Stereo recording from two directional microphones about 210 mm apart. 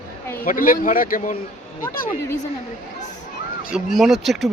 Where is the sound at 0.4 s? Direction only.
40° left (ahead or behind).